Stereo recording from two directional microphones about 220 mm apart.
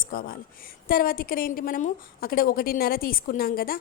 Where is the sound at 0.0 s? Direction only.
40° left (ahead or behind).